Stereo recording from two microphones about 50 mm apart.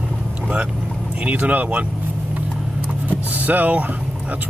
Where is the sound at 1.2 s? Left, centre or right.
Right.